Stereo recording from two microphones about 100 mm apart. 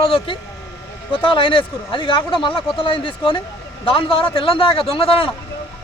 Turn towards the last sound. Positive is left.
turn(degrees=70)  # may be behind; listen again after turning